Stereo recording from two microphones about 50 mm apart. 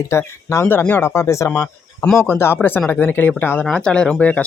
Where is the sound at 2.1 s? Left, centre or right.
Left.